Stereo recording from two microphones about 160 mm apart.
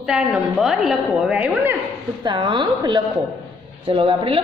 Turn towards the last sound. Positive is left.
turn(degrees=-35)  # may be behind; listen again after turning